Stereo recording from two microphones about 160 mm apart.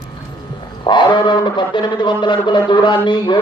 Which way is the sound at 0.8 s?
30° left (ahead or behind).